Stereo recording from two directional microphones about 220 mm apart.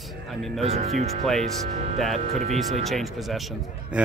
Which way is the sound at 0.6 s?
30° right (ahead or behind).